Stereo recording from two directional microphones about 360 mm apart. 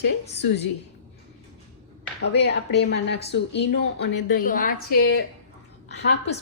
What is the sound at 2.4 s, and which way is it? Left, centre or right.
A woman's voice, left.